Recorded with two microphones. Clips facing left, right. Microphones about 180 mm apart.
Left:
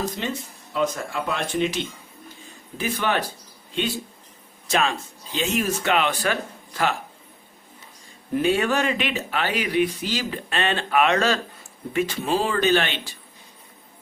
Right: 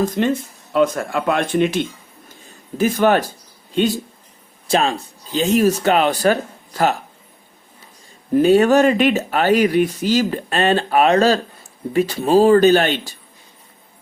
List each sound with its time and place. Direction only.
0.2 s speech: 55° right (ahead or behind)
2.7 s speech: 45° right (ahead or behind)
8.3 s speech: 40° right (ahead or behind)